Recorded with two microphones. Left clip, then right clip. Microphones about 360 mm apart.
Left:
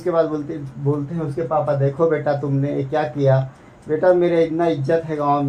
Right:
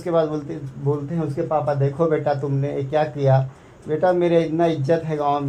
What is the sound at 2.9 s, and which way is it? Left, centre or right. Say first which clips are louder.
A man's voice: even; centre.